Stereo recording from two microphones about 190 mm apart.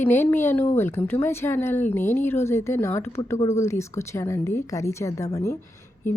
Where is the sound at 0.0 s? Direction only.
10° left (ahead or behind).